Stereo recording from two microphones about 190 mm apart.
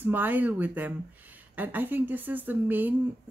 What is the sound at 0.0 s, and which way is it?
Speech, 10° right (ahead or behind).